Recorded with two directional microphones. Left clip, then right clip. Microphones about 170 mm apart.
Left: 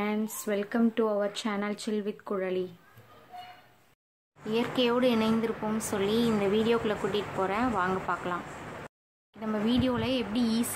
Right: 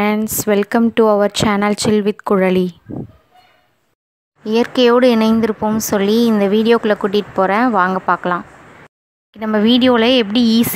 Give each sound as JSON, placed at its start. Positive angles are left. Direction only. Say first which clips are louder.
{"t": 0.0, "sound": "a woman's voice", "louder": "right 15 dB", "side_deg": -60}
{"t": 4.5, "sound": "speech", "louder": "right 15 dB", "side_deg": -50}
{"t": 9.4, "sound": "speech", "louder": "right 15 dB", "side_deg": -45}